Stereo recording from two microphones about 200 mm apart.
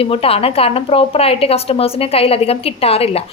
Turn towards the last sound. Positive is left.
turn(degrees=30)  # may be behind; listen again after turning